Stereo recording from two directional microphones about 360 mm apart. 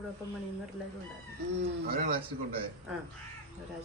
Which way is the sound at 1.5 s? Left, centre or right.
Right.